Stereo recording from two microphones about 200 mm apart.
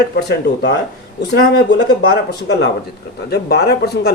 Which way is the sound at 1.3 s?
55° left (ahead or behind).